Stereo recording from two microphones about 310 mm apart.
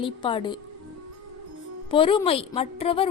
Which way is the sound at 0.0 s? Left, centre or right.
Centre.